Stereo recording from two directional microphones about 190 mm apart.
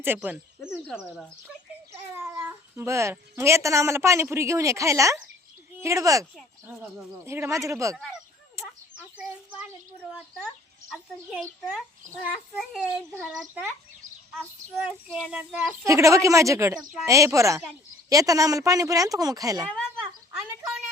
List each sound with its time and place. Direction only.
0.0 s speech: 10° right (ahead or behind)
2.1 s speech: 10° right (ahead or behind)
7.3 s speech: 15° right (ahead or behind)
9.1 s a child's voice: 5° right (ahead or behind)
14.8 s a child's voice: 5° right (ahead or behind)
15.8 s speech: 15° right (ahead or behind)
16.7 s a child's voice: centre (ahead or behind)
17.1 s speech: 15° right (ahead or behind)
19.6 s a child's voice: 5° left (ahead or behind)